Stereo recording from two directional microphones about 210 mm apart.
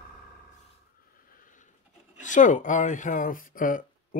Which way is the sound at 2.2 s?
35° left (ahead or behind).